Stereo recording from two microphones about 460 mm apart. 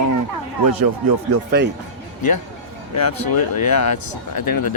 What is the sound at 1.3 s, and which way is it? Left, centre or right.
Speech, right.